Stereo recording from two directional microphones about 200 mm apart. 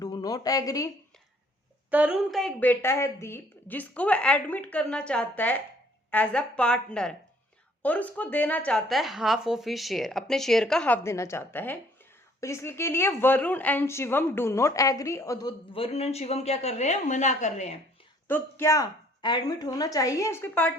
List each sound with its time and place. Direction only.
0.0 s speech: 20° left (ahead or behind)
1.9 s speech: 5° right (ahead or behind); by 17.7 s 35° left (ahead or behind)
18.3 s speech: 10° left (ahead or behind)